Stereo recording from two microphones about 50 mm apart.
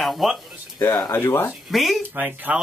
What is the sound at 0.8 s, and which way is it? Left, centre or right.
Speech, left.